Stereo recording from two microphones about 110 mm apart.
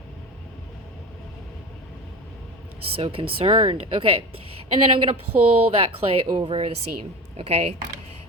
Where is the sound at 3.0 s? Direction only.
55° right (ahead or behind).